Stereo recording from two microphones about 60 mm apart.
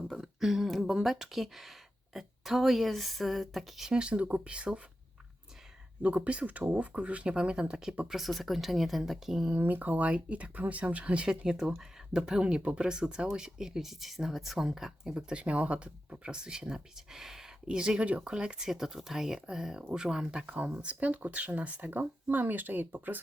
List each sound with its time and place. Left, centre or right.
0.2 s a woman's voice: centre
6.0 s a woman's voice: right; by 9.5 s centre
9.6 s speech: right